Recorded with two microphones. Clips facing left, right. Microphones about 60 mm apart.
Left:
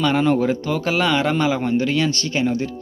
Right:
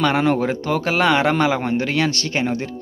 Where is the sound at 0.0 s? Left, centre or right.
Right.